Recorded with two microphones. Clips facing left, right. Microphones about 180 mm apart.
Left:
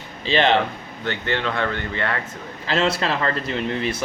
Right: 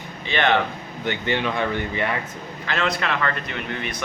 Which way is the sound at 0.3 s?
30° left (ahead or behind).